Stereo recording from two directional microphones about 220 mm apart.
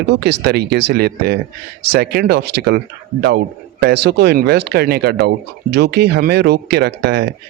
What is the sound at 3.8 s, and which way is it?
Speech, 50° right (ahead or behind).